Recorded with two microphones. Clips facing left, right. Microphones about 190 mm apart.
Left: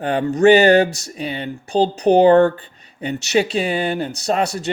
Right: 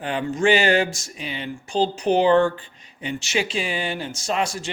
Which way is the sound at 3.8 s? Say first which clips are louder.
Left 7 dB; 45° left (ahead or behind).